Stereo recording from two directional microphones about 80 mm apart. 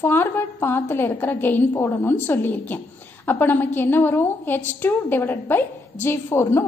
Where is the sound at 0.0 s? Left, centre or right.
Left.